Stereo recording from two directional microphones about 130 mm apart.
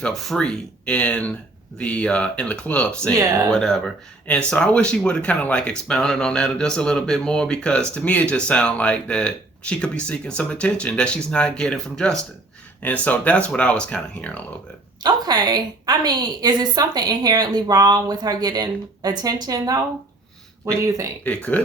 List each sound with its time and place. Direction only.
0.0 s speech: 5° left (ahead or behind)
15.0 s a woman's voice: 30° right (ahead or behind)
20.8 s speech: 25° right (ahead or behind)
21.2 s speech: 10° left (ahead or behind)